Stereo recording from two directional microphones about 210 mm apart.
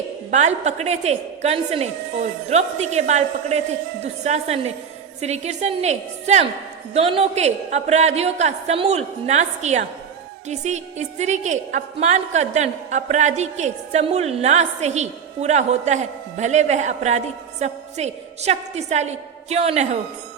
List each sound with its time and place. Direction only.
0.3 s a woman's voice: 35° right (ahead or behind)